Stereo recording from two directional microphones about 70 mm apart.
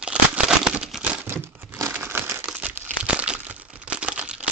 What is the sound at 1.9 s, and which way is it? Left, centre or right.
Crumpling, right.